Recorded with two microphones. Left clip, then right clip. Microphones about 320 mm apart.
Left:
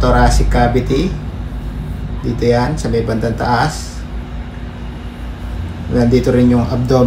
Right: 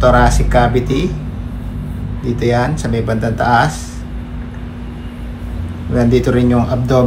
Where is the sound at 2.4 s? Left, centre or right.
Centre.